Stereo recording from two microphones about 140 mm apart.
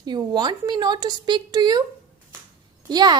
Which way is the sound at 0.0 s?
30° right (ahead or behind).